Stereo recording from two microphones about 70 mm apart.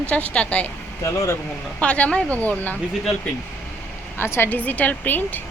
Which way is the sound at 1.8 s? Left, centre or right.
Centre.